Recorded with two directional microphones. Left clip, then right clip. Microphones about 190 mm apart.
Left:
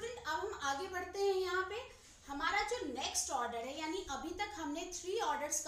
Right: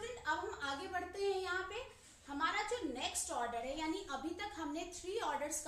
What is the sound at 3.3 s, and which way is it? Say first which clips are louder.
A woman's voice: left 1 dB; 5° left (ahead or behind).